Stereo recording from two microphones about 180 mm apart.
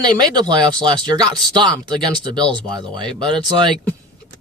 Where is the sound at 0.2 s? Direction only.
25° right (ahead or behind).